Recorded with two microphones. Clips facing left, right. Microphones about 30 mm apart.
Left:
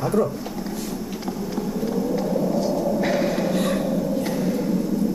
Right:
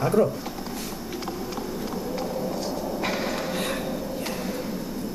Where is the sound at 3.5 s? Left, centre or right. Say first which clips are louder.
Left 6 dB; centre.